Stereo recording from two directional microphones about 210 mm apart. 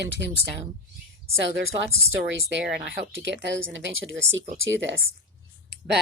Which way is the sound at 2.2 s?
60° right (ahead or behind).